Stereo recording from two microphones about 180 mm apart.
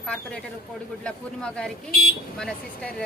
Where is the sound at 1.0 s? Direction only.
5° left (ahead or behind).